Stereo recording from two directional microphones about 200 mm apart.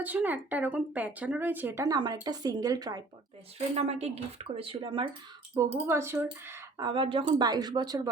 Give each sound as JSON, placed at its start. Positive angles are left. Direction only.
{"t": 0.0, "sound": "speech", "side_deg": -10}
{"t": 3.8, "sound": "speech", "side_deg": -30}
{"t": 5.5, "sound": "speech", "side_deg": -15}